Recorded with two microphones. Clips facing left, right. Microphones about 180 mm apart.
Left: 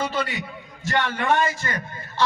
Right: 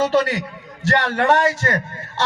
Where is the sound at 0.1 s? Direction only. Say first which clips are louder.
Right 9 dB; 80° right.